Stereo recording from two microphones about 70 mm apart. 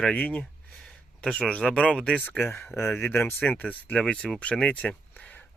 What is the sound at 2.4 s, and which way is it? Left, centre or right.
Speech, left.